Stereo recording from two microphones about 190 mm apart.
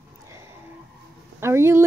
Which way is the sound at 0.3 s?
15° right (ahead or behind).